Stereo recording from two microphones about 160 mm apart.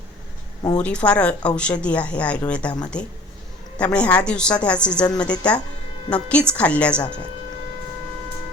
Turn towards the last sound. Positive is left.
turn(degrees=5)  # may be behind; listen again after turning